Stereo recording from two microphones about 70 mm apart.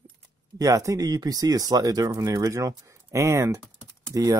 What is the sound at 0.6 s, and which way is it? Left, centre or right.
Speech, right.